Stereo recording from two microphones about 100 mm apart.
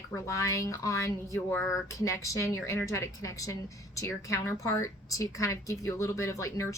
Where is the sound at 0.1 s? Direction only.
30° left (ahead or behind).